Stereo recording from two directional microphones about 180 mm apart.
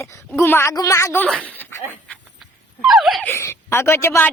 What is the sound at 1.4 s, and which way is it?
Dog, 10° left (ahead or behind).